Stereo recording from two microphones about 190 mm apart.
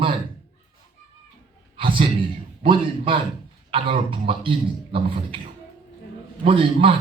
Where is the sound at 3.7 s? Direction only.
30° right (ahead or behind).